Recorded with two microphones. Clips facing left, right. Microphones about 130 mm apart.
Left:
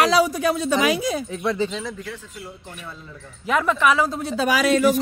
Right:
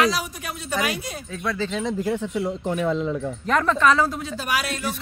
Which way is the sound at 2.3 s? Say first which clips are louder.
Right 14 dB; 75° right (ahead or behind).